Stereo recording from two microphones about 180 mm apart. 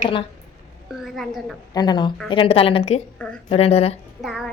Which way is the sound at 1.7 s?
25° left (ahead or behind).